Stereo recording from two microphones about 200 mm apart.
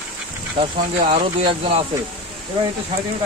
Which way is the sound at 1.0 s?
30° right (ahead or behind).